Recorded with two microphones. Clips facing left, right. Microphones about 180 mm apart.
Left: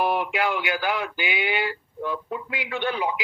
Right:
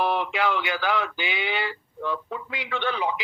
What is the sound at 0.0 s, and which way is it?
A man's voice, 10° left (ahead or behind).